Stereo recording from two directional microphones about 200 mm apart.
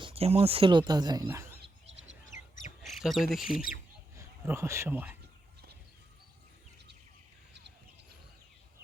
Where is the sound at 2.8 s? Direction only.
Centre (ahead or behind).